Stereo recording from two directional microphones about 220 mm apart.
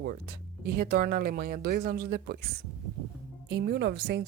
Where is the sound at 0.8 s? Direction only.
45° right (ahead or behind).